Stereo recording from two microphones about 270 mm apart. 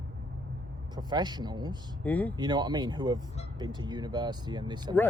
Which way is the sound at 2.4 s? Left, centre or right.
Centre.